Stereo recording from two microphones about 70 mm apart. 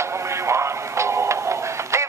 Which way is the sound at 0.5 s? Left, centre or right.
Right.